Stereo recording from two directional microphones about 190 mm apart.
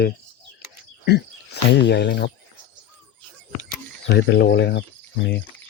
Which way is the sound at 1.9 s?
60° left (ahead or behind).